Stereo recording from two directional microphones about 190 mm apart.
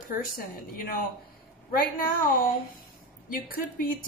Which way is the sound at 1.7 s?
50° left (ahead or behind).